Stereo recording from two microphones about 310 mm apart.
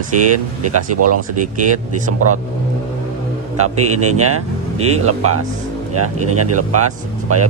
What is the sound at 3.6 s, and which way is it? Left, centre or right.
Speech, right.